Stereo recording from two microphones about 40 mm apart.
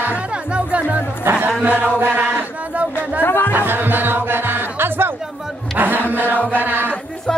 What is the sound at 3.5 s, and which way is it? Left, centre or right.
Music, right.